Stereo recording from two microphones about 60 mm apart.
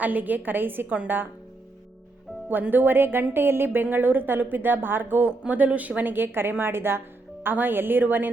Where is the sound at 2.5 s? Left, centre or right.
Right.